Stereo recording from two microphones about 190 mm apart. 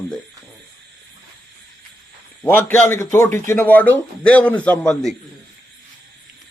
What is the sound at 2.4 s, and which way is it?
A man's voice, 15° left (ahead or behind).